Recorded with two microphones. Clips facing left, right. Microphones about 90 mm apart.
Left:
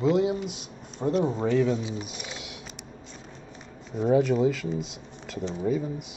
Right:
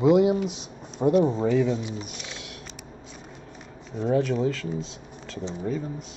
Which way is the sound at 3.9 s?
5° left (ahead or behind).